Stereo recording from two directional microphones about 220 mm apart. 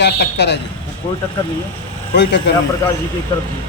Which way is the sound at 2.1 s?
50° left (ahead or behind).